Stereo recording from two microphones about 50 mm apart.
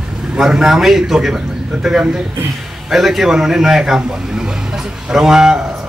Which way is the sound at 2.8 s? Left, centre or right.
Centre.